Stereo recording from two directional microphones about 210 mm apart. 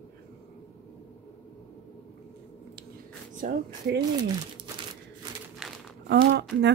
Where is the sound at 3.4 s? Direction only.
40° right (ahead or behind).